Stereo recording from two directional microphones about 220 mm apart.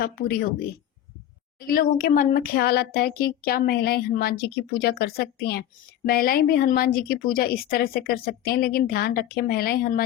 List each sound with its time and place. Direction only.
0.0 s speech: 45° left (ahead or behind)
1.5 s speech: 40° left (ahead or behind)